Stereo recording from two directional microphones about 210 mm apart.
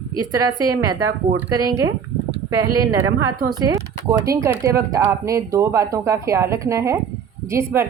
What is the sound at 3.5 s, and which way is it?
Speech, 15° right (ahead or behind).